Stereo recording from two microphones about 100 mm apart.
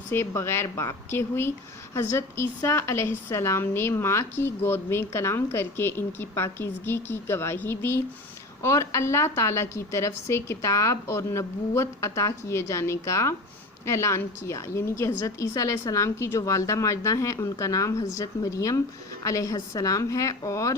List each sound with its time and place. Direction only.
0.1 s a woman's voice: 25° left (ahead or behind)